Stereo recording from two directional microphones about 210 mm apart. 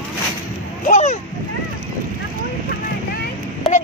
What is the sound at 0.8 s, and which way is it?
Splash, 35° left (ahead or behind).